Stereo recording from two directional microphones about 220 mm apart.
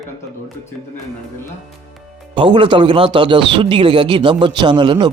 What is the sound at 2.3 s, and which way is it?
Speech, 20° right (ahead or behind).